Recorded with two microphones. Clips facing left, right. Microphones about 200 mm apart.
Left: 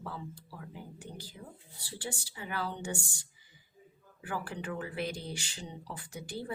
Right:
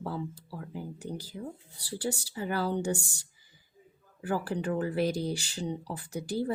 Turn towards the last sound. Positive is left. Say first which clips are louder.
# right 9 dB
turn(degrees=-40)  # may be behind; listen again after turning